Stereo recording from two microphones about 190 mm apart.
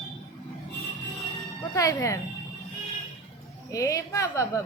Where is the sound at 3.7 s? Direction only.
15° left (ahead or behind).